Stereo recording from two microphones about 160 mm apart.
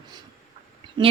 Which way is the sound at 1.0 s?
30° right (ahead or behind).